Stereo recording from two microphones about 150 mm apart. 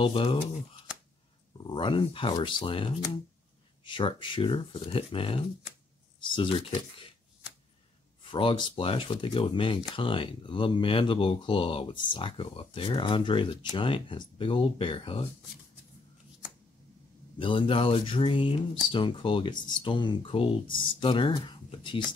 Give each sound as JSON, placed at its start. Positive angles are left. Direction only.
{"t": 0.0, "sound": "speech", "side_deg": 35}
{"t": 1.6, "sound": "speech", "side_deg": 30}
{"t": 8.2, "sound": "speech", "side_deg": 35}
{"t": 17.4, "sound": "speech", "side_deg": 35}